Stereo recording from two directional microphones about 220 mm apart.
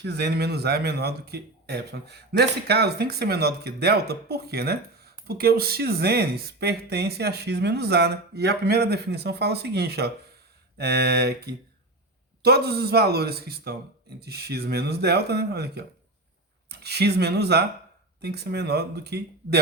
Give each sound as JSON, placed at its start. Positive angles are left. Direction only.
{"t": 0.0, "sound": "speech", "side_deg": -50}